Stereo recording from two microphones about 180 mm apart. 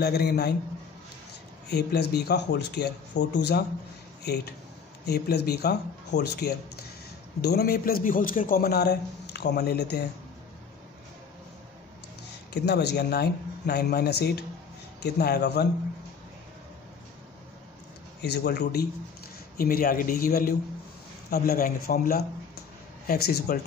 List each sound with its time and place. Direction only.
0.0 s a man's voice: 65° left (ahead or behind)
1.7 s a man's voice: 65° left (ahead or behind)
12.6 s a man's voice: 65° left (ahead or behind)
18.2 s a man's voice: 65° left (ahead or behind)